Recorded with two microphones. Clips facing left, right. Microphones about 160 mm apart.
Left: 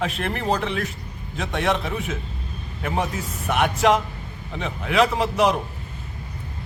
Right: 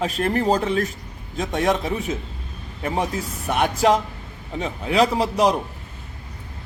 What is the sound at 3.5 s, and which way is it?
A man's voice, 35° right (ahead or behind).